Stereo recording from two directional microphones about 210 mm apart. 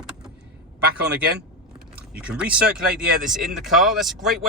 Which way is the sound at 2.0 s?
5° right (ahead or behind).